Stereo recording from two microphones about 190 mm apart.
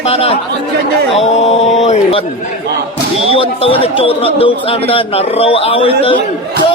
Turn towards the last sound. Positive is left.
turn(degrees=30)  # may be behind; listen again after turning